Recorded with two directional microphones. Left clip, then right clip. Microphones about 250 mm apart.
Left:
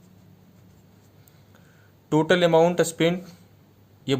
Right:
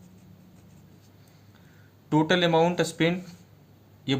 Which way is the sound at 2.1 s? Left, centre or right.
Left.